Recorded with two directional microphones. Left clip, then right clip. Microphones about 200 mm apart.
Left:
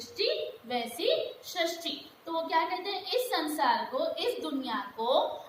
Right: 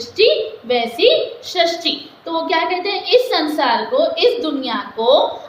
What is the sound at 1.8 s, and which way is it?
A woman's voice, 45° right (ahead or behind).